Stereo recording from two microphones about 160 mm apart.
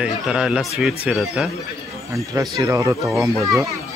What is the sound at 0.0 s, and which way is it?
Speech, 5° right (ahead or behind).